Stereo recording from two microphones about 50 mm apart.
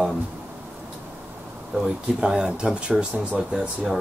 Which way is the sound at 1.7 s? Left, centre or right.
Centre.